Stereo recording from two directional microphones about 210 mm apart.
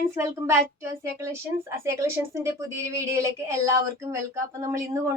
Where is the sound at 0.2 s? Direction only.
10° right (ahead or behind).